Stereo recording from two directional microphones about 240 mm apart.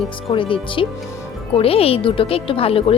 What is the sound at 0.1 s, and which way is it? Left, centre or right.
Speech, left.